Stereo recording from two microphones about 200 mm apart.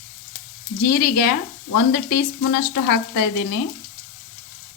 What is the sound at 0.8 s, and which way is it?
A woman's voice, 45° left (ahead or behind).